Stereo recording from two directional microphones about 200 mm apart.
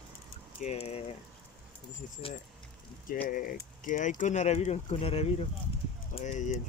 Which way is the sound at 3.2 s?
45° left (ahead or behind).